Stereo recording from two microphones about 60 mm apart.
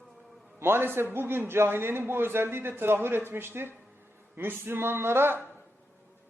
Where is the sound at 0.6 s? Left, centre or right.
Right.